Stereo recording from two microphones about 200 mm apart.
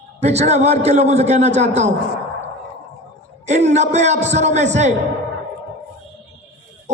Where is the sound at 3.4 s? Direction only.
35° right (ahead or behind).